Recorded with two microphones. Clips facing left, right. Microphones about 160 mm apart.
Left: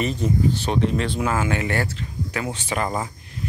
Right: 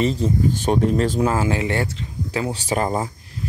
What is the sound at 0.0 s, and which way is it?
Speech, 30° right (ahead or behind).